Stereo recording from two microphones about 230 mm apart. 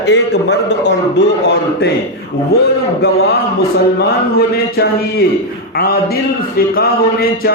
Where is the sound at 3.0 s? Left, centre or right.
Left.